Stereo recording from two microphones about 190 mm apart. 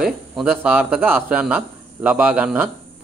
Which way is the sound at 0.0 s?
5° right (ahead or behind).